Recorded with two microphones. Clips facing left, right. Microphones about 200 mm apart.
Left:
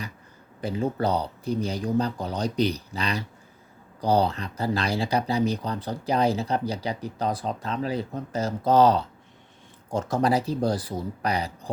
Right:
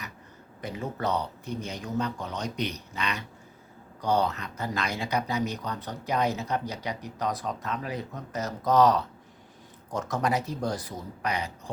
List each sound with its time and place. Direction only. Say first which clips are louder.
0.6 s speech: left 6 dB; 30° left (ahead or behind)